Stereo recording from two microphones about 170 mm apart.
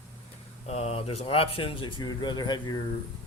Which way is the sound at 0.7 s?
40° left (ahead or behind).